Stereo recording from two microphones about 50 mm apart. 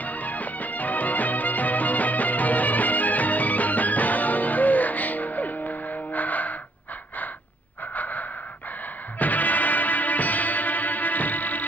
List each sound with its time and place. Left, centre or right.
0.0 s music: left
7.9 s wheeze: left
9.2 s music: left